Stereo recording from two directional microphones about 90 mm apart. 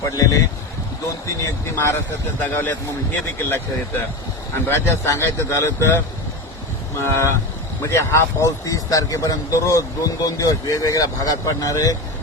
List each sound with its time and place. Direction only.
0.0 s speech: 40° left (ahead or behind)
2.4 s a man's voice: 20° left (ahead or behind)
7.0 s speech: 30° left (ahead or behind)